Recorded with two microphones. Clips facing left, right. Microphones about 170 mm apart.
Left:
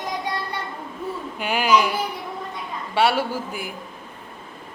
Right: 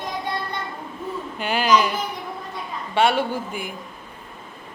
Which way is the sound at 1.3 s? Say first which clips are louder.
Even; 10° left (ahead or behind).